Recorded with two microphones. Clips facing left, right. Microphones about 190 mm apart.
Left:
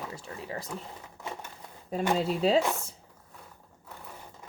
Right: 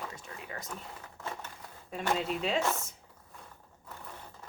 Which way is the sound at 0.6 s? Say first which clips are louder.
Left 4 dB; 10° left (ahead or behind).